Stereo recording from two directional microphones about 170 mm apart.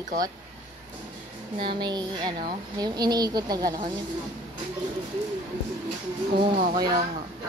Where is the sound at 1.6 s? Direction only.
25° right (ahead or behind).